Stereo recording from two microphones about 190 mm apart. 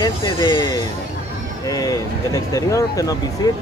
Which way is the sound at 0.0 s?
25° left (ahead or behind).